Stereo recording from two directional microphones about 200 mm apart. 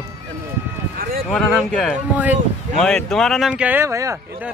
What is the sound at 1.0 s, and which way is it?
Speech, 45° right (ahead or behind).